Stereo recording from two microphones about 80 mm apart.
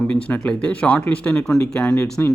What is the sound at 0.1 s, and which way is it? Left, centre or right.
Speech, centre.